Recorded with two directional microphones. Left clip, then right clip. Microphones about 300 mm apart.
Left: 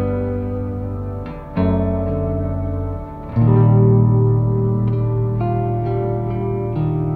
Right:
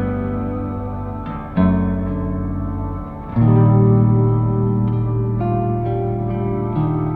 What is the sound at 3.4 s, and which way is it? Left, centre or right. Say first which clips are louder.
Music: right 1 dB; left.